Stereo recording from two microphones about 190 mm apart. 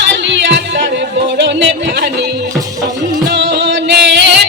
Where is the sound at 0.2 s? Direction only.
70° right (ahead or behind).